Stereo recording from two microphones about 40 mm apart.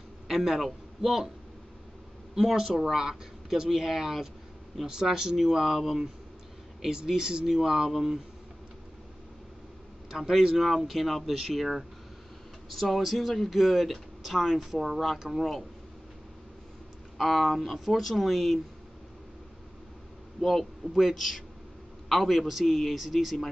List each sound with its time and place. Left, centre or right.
0.3 s a man's voice: centre
2.3 s speech: centre
10.0 s a sound: centre
10.4 s speech: centre
17.2 s speech: centre
20.3 s a man's voice: centre